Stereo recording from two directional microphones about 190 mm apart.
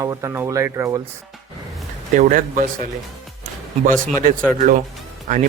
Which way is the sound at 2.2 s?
45° right (ahead or behind).